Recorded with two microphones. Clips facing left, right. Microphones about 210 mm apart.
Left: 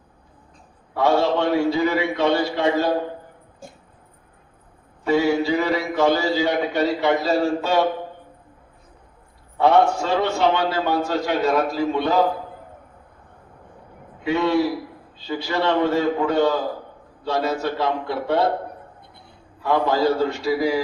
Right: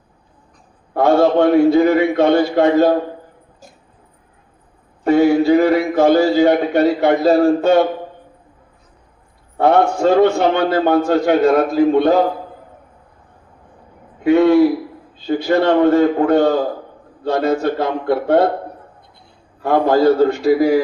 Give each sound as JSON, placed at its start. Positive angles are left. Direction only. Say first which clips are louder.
{"t": 0.9, "sound": "a man's voice", "louder": "right 6 dB", "side_deg": -55}
{"t": 5.0, "sound": "a man's voice", "louder": "right 7 dB", "side_deg": -55}
{"t": 9.6, "sound": "a man's voice", "louder": "right 3 dB", "side_deg": -55}
{"t": 14.3, "sound": "a man's voice", "louder": "right 9 dB", "side_deg": -55}
{"t": 19.6, "sound": "a man's voice", "louder": "right 6 dB", "side_deg": -50}